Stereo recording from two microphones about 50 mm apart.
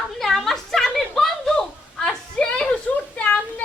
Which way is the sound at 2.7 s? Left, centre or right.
Left.